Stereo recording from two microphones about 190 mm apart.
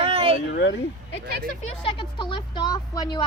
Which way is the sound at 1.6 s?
25° left (ahead or behind).